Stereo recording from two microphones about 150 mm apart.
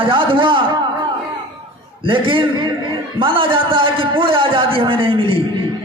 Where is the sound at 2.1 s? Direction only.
35° right (ahead or behind).